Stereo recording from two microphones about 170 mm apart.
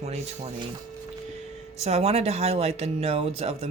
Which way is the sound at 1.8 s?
40° right (ahead or behind).